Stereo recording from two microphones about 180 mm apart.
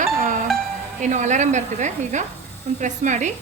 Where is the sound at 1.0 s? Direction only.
40° right (ahead or behind).